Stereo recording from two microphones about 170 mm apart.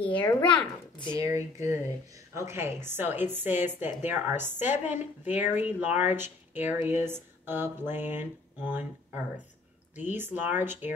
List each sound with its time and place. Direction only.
0.1 s speech: 10° left (ahead or behind)
1.1 s speech: 15° right (ahead or behind)